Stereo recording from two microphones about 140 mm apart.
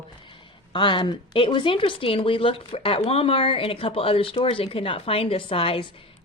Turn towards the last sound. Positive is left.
turn(degrees=40)  # may be behind; listen again after turning